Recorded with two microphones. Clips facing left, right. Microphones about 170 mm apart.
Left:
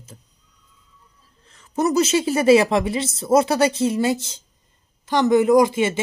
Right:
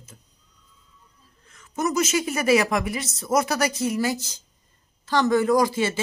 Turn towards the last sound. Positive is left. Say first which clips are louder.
# left 5 dB
turn(degrees=20)  # may be behind; listen again after turning